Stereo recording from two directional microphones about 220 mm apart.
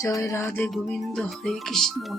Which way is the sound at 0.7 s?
Centre (ahead or behind).